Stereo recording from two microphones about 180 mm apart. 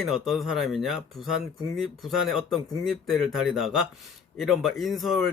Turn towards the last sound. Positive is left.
turn(degrees=0)  # may be behind; listen again after turning